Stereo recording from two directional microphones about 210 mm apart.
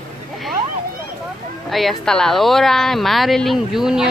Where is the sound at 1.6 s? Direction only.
Centre (ahead or behind).